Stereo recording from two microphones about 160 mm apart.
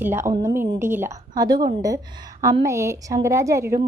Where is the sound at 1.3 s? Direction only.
25° right (ahead or behind).